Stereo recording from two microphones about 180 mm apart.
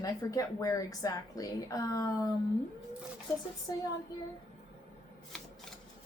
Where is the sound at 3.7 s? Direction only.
20° left (ahead or behind).